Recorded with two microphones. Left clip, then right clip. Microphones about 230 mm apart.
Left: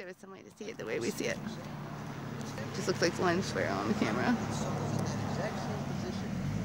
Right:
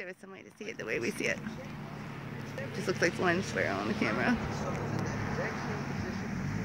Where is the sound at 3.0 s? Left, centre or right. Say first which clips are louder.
Right 1 dB; centre.